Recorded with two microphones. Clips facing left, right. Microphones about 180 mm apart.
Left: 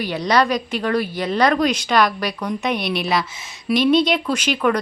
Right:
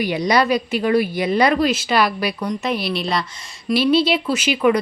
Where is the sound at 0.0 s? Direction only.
10° right (ahead or behind).